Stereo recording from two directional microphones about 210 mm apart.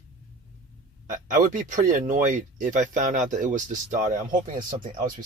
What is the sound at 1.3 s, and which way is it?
Speech, 40° right (ahead or behind).